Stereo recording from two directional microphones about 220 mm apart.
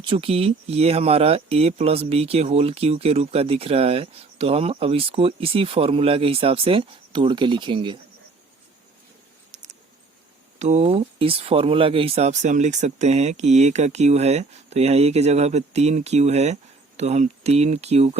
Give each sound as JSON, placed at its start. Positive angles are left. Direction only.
{"t": 0.0, "sound": "speech", "side_deg": -25}
{"t": 10.6, "sound": "speech", "side_deg": -30}